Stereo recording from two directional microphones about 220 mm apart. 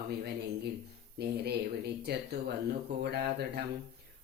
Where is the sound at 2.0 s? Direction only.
50° right (ahead or behind).